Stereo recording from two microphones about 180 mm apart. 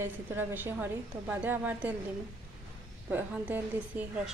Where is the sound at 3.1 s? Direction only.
10° right (ahead or behind).